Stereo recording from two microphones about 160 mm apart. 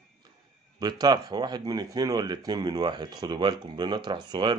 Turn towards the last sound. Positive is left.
turn(degrees=-30)  # may be behind; listen again after turning